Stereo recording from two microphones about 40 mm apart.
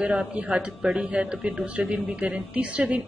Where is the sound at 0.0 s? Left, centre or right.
Right.